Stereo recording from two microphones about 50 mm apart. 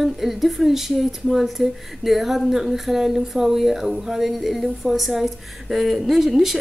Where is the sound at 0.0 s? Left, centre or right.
Centre.